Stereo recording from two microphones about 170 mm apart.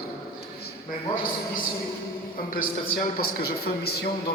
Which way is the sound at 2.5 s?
60° left (ahead or behind).